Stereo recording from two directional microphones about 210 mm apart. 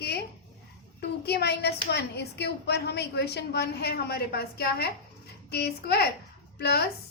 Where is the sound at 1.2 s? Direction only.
50° left (ahead or behind).